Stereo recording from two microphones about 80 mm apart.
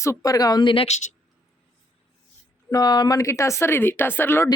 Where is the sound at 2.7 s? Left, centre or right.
Left.